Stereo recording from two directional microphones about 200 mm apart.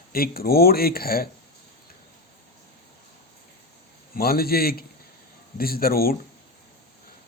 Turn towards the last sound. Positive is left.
turn(degrees=50)  # may be behind; listen again after turning